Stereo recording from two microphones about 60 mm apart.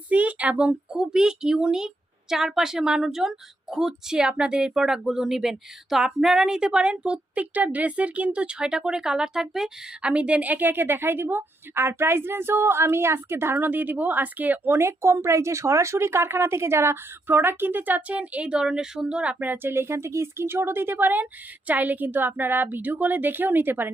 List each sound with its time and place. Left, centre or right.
0.1 s a woman's voice: right; by 9.7 s centre
10.0 s a woman's voice: centre
14.8 s speech: right; by 19.5 s centre
19.5 s a woman's voice: right